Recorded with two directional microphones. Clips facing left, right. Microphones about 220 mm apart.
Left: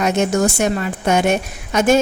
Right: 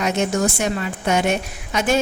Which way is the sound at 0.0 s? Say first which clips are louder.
Left 3 dB; 45° left (ahead or behind).